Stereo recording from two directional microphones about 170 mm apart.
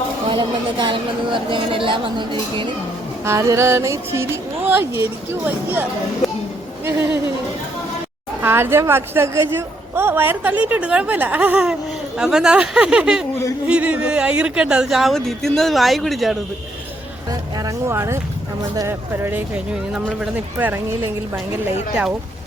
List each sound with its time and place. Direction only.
0.3 s a woman's voice: 25° right (ahead or behind); by 5.9 s 10° right (ahead or behind)
8.4 s a woman's voice: 15° right (ahead or behind)
17.6 s a woman's voice: 15° right (ahead or behind)